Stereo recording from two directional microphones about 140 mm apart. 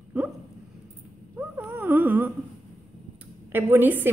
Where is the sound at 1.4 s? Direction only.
15° right (ahead or behind).